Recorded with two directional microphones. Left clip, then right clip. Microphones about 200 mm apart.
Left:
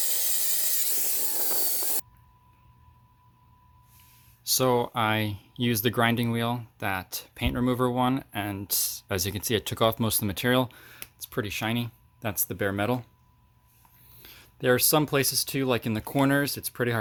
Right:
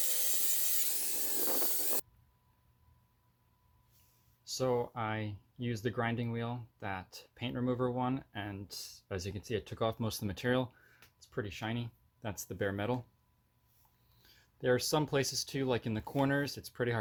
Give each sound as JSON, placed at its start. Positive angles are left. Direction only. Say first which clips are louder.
{"t": 0.0, "sound": "sawing", "louder": "left 7 dB", "side_deg": 0}
{"t": 4.4, "sound": "speech", "louder": "left 9 dB", "side_deg": 35}
{"t": 10.7, "sound": "speech", "louder": "left 14 dB", "side_deg": 35}
{"t": 14.2, "sound": "speech", "louder": "left 8 dB", "side_deg": 20}